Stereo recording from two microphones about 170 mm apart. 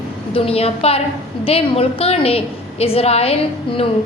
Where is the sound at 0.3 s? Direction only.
35° left (ahead or behind).